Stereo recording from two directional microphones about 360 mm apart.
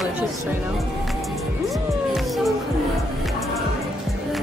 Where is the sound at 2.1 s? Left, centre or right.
Centre.